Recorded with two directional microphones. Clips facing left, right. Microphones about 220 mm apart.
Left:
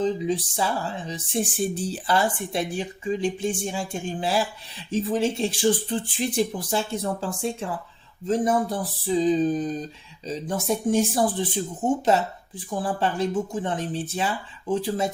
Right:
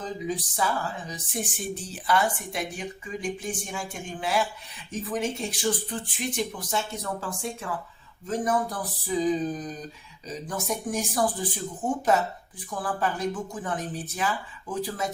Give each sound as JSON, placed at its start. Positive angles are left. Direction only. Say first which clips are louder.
{"t": 0.0, "sound": "speech", "louder": "left 7 dB", "side_deg": 25}